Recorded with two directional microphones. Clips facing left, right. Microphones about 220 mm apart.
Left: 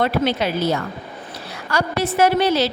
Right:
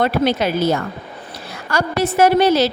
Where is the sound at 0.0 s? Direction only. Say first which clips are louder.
Right 2 dB; 45° right (ahead or behind).